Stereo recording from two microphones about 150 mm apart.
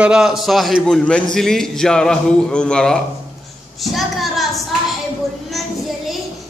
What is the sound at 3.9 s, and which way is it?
Child singing, centre (ahead or behind).